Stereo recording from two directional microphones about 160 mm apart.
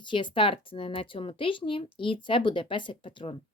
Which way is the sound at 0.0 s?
30° left (ahead or behind).